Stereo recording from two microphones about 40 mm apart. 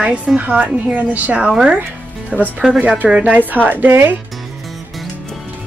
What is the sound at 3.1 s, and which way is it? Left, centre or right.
Speech, right.